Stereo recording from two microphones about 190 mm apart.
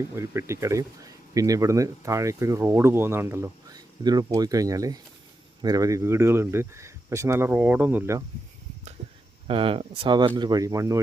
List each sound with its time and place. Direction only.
0.2 s speech: 15° right (ahead or behind)
9.5 s speech: 30° right (ahead or behind)